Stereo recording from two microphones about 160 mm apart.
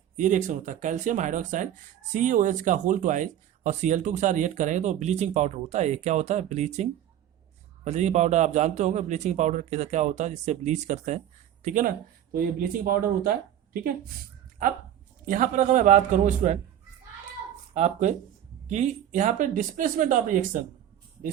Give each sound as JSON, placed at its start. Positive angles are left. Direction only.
{"t": 0.2, "sound": "speech", "side_deg": -50}
{"t": 7.9, "sound": "speech", "side_deg": -45}
{"t": 11.6, "sound": "speech", "side_deg": -55}
{"t": 15.3, "sound": "speech", "side_deg": -55}
{"t": 17.7, "sound": "speech", "side_deg": -45}